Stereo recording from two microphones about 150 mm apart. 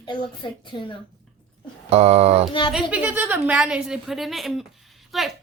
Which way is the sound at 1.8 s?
45° right (ahead or behind).